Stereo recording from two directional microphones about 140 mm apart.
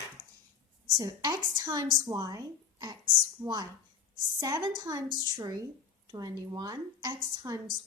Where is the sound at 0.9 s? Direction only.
25° right (ahead or behind).